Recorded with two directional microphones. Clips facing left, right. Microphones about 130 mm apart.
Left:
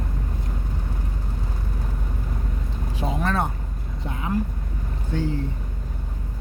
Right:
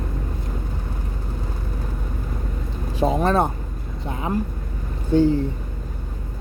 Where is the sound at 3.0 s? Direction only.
30° right (ahead or behind).